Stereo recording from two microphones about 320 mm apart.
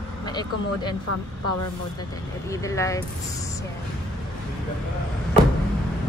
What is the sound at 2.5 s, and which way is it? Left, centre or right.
Speech, centre.